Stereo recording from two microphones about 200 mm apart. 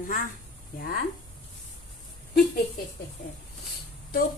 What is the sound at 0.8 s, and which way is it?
Speech, 50° left (ahead or behind).